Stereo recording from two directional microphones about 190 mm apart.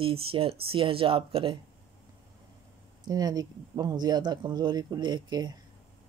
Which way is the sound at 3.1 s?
20° right (ahead or behind).